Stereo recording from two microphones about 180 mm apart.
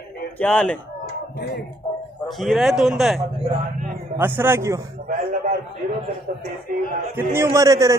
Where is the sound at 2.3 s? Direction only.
Centre (ahead or behind).